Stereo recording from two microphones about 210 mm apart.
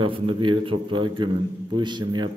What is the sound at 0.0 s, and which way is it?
A man's voice, 25° right (ahead or behind).